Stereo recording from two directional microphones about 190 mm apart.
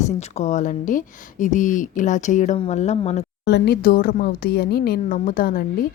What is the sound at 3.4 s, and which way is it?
Speech, 60° left (ahead or behind).